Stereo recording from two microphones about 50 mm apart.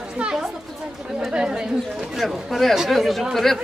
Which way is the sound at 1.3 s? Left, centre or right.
Centre.